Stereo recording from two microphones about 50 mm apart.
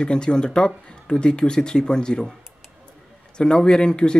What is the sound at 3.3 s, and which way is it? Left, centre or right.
Speech, centre.